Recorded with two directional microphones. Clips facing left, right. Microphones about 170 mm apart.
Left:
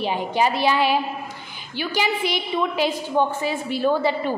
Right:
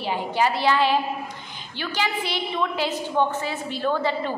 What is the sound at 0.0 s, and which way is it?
A woman's voice, 20° left (ahead or behind).